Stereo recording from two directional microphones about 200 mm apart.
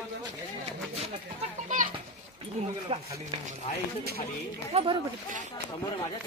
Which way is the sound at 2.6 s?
35° right (ahead or behind).